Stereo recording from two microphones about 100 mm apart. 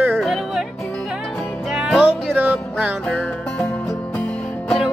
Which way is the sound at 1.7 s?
5° right (ahead or behind).